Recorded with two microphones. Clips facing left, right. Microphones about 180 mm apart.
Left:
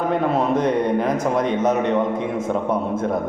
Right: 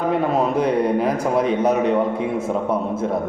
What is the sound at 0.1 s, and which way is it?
A man's voice, 5° right (ahead or behind).